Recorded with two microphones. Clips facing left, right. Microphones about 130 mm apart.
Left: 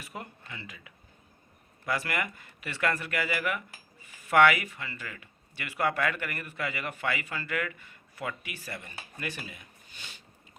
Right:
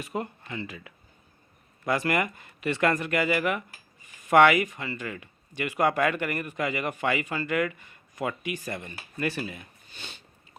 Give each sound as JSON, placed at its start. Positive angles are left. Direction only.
{"t": 0.0, "sound": "speech", "side_deg": -25}